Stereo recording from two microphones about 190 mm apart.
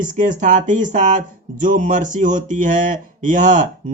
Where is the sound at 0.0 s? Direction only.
45° right (ahead or behind).